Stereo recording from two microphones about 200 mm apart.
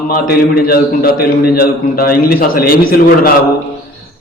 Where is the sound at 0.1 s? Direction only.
50° left (ahead or behind).